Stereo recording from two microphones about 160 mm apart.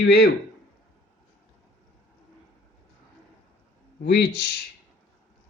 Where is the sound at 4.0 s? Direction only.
85° left.